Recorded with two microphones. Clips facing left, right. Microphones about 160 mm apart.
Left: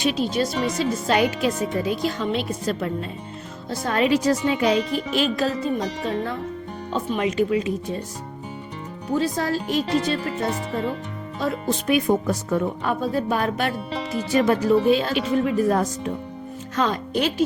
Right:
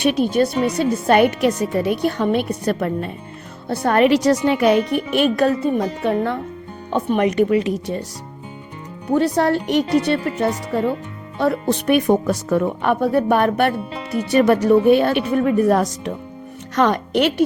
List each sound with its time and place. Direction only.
0.0 s speech: 60° right (ahead or behind); by 8.0 s 75° right (ahead or behind)
9.1 s speech: 65° right (ahead or behind)